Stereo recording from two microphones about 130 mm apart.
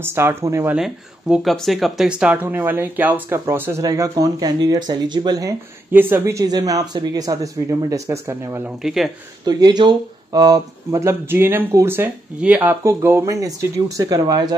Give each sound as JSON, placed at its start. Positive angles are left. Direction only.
{"t": 0.0, "sound": "speech", "side_deg": -20}
{"t": 0.7, "sound": "speech", "side_deg": -5}
{"t": 3.8, "sound": "speech", "side_deg": -30}
{"t": 5.9, "sound": "speech", "side_deg": -15}
{"t": 6.4, "sound": "speech", "side_deg": -30}
{"t": 8.8, "sound": "speech", "side_deg": 0}
{"t": 9.4, "sound": "speech", "side_deg": -30}
{"t": 12.8, "sound": "speech", "side_deg": -20}